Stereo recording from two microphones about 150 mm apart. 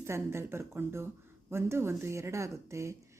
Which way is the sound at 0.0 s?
15° right (ahead or behind).